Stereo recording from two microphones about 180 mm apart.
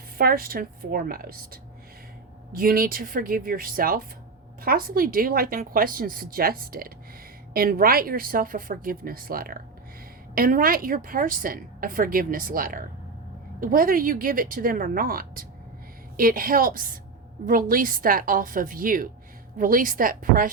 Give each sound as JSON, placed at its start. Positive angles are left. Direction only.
{"t": 0.2, "sound": "a woman's voice", "side_deg": -55}
{"t": 2.5, "sound": "a woman's voice", "side_deg": -55}